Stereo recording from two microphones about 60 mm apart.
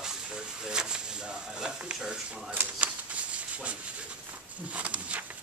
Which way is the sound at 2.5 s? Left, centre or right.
Right.